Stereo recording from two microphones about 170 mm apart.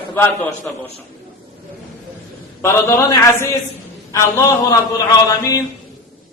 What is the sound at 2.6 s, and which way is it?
Speech, 15° left (ahead or behind).